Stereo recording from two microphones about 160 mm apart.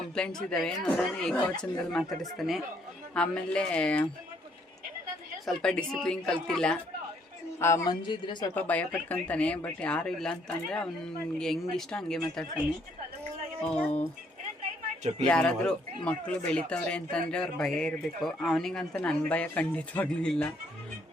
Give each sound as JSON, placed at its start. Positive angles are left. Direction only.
{"t": 0.1, "sound": "speech", "side_deg": 5}
{"t": 3.2, "sound": "speech", "side_deg": 5}
{"t": 5.6, "sound": "speech", "side_deg": 5}
{"t": 7.6, "sound": "speech", "side_deg": 15}
{"t": 8.0, "sound": "a woman's voice", "side_deg": 30}
{"t": 8.5, "sound": "speech", "side_deg": 10}
{"t": 13.6, "sound": "speech", "side_deg": 5}
{"t": 15.3, "sound": "speech", "side_deg": 5}